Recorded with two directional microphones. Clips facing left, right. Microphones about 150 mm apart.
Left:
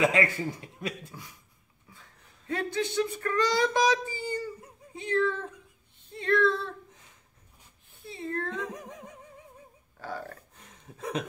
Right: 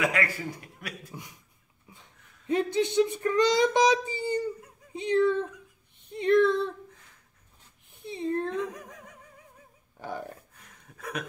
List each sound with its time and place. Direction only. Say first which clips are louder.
0.0 s a man's voice: left 3 dB; 25° left (ahead or behind)
1.1 s speech: right 3 dB; 20° right (ahead or behind)
8.0 s speech: right 5 dB; 20° right (ahead or behind)
8.5 s speech: right 3 dB; 25° left (ahead or behind)
9.9 s a sound: right 1 dB; 20° right (ahead or behind)
10.7 s a sound: left 4 dB; 25° left (ahead or behind)